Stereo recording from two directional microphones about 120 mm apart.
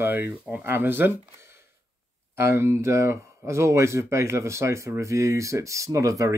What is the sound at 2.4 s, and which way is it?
Speech, 20° right (ahead or behind).